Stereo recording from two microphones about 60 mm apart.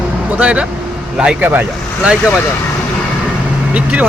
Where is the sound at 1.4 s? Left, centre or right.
Right.